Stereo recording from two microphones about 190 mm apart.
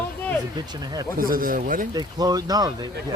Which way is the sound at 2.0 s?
20° right (ahead or behind).